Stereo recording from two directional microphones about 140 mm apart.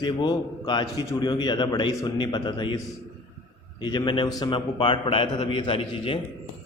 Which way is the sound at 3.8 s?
35° left (ahead or behind).